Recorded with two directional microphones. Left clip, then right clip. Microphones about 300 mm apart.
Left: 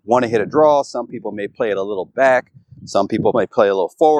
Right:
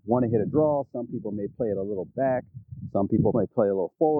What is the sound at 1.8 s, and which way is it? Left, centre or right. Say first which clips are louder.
Speech: left 8 dB; left.